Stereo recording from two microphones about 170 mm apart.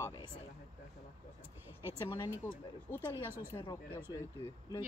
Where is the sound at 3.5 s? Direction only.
20° left (ahead or behind).